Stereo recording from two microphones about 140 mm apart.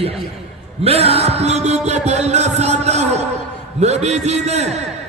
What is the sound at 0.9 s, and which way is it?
Music, 45° right (ahead or behind).